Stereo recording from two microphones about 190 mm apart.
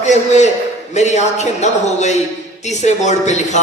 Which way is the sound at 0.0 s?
35° left (ahead or behind).